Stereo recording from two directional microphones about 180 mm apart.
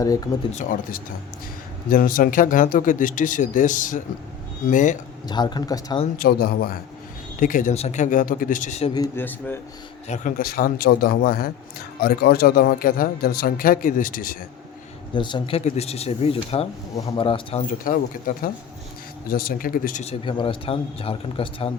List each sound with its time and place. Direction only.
0.5 s a man's voice: 45° left (ahead or behind)
5.3 s a man's voice: 25° left (ahead or behind)
6.1 s a man's voice: 55° left (ahead or behind)
9.1 s speech: 10° left (ahead or behind)
10.1 s a man's voice: 50° left (ahead or behind)
15.1 s a man's voice: 25° left (ahead or behind)
17.7 s a man's voice: 50° left (ahead or behind)
20.2 s a man's voice: 30° left (ahead or behind)